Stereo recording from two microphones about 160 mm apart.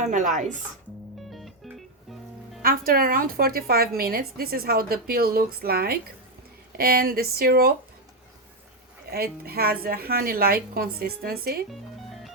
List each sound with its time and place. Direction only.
0.0 s speech: 50° right (ahead or behind)
1.3 s music: centre (ahead or behind)
2.6 s a woman's voice: 65° right (ahead or behind)
9.0 s a woman's voice: 70° right (ahead or behind)
11.7 s music: centre (ahead or behind)